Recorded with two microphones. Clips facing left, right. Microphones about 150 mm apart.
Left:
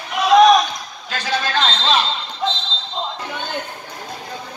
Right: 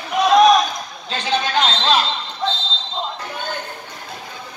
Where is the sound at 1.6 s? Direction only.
5° right (ahead or behind).